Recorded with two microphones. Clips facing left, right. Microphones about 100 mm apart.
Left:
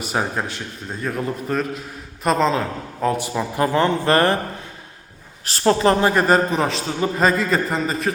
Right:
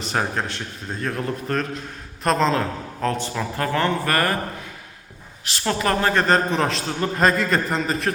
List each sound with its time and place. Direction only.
0.0 s a man's voice: 5° left (ahead or behind); by 4.4 s 25° left (ahead or behind)
5.5 s a woman's voice: 40° left (ahead or behind)
5.8 s a man's voice: 20° left (ahead or behind); by 8.1 s centre (ahead or behind)